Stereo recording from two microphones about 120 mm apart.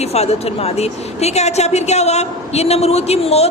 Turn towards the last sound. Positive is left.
turn(degrees=60)  # may be behind; listen again after turning